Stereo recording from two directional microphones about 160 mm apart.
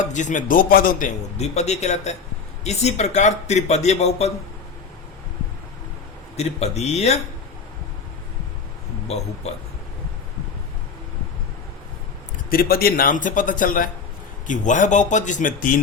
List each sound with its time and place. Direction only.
0.0 s a man's voice: 50° left (ahead or behind)
6.3 s a man's voice: 45° left (ahead or behind)
9.1 s a man's voice: 40° left (ahead or behind)
12.5 s a man's voice: 65° left (ahead or behind)